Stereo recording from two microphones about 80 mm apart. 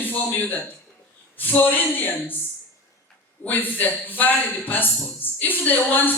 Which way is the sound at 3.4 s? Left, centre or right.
Left.